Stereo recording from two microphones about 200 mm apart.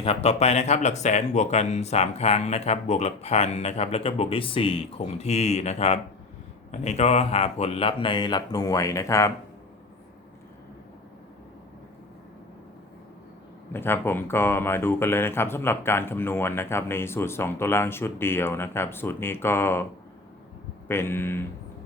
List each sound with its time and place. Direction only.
0.0 s speech: 30° left (ahead or behind); by 9.3 s 15° left (ahead or behind)
13.7 s speech: 10° left (ahead or behind)
20.8 s speech: 10° left (ahead or behind)